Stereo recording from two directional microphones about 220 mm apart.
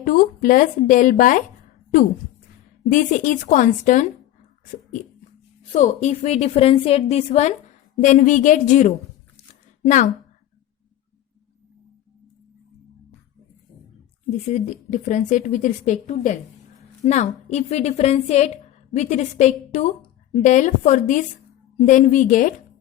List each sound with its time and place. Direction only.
0.0 s a woman's voice: 40° left (ahead or behind)
2.9 s a woman's voice: 35° left (ahead or behind)
5.7 s a woman's voice: 30° left (ahead or behind)
14.3 s a woman's voice: 30° left (ahead or behind)